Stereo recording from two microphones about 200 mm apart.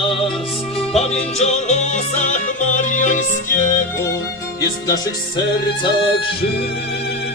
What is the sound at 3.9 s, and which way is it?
Music, 15° left (ahead or behind).